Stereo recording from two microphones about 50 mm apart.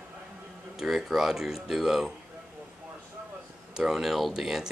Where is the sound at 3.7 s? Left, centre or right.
Centre.